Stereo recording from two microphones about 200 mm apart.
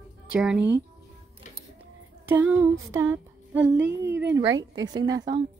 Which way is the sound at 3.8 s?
55° right (ahead or behind).